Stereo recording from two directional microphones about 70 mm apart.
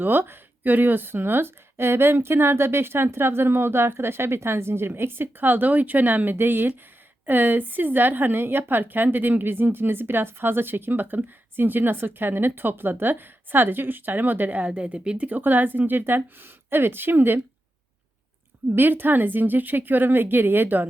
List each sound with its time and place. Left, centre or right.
0.0 s a woman's voice: right
18.7 s a woman's voice: right